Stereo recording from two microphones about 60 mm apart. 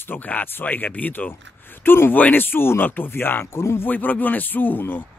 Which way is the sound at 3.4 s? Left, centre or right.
Left.